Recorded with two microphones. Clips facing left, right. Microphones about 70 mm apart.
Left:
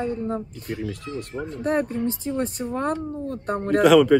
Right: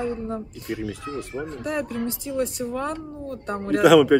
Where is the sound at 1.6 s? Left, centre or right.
Left.